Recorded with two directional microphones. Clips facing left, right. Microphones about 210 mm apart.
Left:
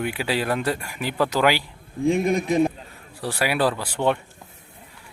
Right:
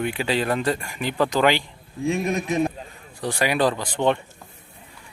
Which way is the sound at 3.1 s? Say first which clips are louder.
Right 1 dB; 5° left (ahead or behind).